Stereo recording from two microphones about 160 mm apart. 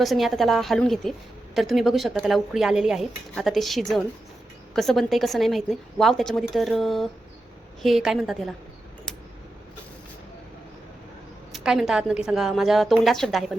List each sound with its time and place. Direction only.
0.0 s a woman's voice: centre (ahead or behind)
11.5 s a woman's voice: 5° right (ahead or behind)